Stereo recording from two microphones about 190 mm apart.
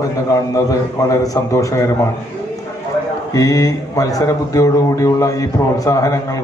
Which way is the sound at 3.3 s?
20° left (ahead or behind).